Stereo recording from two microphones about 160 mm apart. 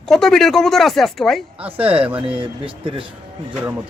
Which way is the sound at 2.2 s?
35° right (ahead or behind).